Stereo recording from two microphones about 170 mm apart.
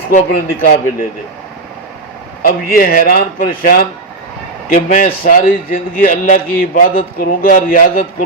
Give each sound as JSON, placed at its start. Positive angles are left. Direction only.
{"t": 0.1, "sound": "speech", "side_deg": 50}
{"t": 2.4, "sound": "a man's voice", "side_deg": 60}